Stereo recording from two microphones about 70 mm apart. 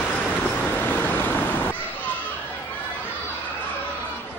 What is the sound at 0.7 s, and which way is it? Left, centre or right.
Waves, left.